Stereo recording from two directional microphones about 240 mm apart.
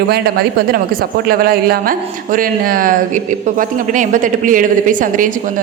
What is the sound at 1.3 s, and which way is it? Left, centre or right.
Speech, right.